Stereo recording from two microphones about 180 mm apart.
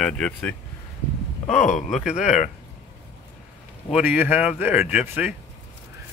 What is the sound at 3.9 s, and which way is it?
Speech, 10° right (ahead or behind).